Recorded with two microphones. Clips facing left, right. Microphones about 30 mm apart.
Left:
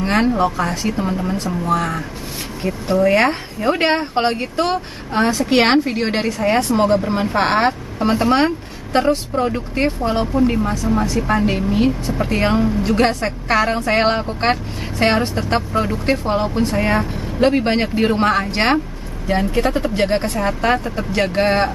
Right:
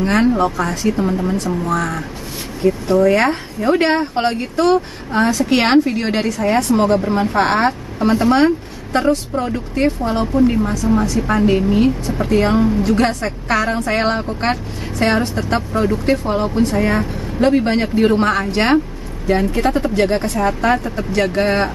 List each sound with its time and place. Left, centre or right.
0.0 s a woman's voice: centre
0.9 s a woman's voice: centre
8.9 s a woman's voice: left
9.3 s a woman's voice: centre
19.2 s speech: centre
20.0 s a woman's voice: centre
20.2 s a woman's voice: centre